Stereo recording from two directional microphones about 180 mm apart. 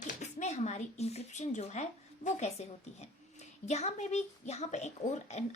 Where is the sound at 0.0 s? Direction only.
40° left (ahead or behind).